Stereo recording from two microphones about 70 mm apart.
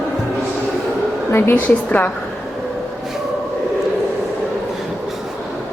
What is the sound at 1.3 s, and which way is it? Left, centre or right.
Speech, left.